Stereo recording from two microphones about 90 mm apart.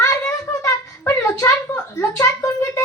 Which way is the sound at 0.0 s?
30° left (ahead or behind).